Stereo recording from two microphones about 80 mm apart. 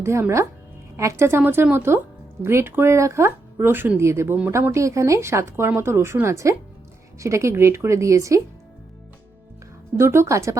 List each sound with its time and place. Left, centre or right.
0.0 s speech: right
10.0 s speech: right